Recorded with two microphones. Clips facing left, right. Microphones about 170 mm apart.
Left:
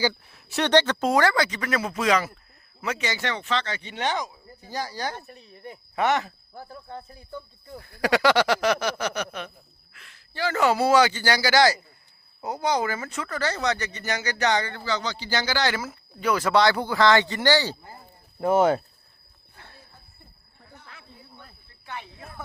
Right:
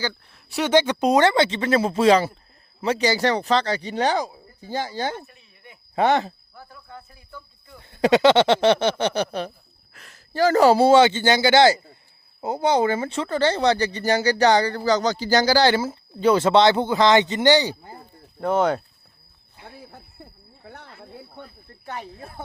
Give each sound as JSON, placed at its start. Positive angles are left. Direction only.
{"t": 0.0, "sound": "speech", "side_deg": 5}
{"t": 5.1, "sound": "a sound", "side_deg": 40}
{"t": 6.0, "sound": "speech", "side_deg": -30}
{"t": 6.5, "sound": "speech", "side_deg": 30}
{"t": 7.8, "sound": "speech", "side_deg": -25}
{"t": 18.3, "sound": "speech", "side_deg": 5}
{"t": 19.8, "sound": "a sound", "side_deg": -75}
{"t": 20.7, "sound": "wild animals", "side_deg": -75}
{"t": 21.0, "sound": "cricket", "side_deg": -65}
{"t": 21.7, "sound": "cricket", "side_deg": -40}